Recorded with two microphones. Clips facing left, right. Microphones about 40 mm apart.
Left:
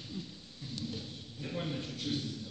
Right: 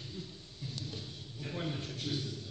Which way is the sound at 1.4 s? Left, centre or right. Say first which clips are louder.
Left 1 dB; centre.